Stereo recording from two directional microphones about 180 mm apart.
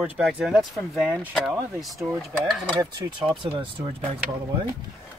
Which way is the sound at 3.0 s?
25° right (ahead or behind).